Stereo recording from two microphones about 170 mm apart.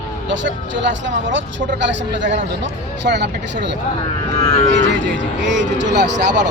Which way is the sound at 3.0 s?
90° right.